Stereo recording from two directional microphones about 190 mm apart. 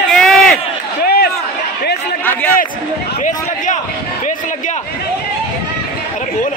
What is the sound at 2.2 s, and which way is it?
Speech, 10° left (ahead or behind).